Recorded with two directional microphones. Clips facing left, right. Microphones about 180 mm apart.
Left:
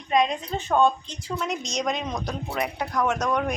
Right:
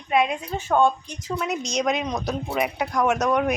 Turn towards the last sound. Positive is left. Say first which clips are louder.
# right 4 dB
turn(degrees=-10)  # may be behind; listen again after turning